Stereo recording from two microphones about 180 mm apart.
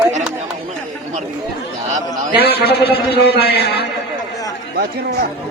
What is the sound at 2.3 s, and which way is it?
A man's voice, 60° left (ahead or behind).